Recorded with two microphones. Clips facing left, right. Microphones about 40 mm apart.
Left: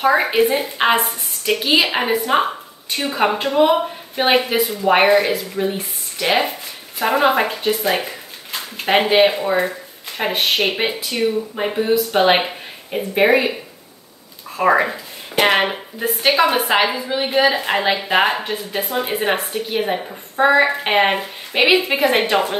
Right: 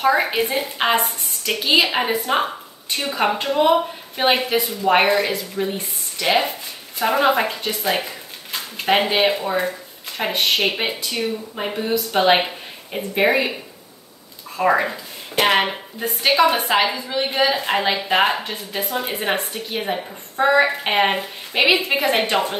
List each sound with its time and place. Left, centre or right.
0.0 s a woman's voice: centre
14.6 s speech: centre